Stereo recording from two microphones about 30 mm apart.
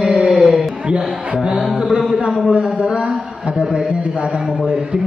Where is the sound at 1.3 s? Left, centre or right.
Right.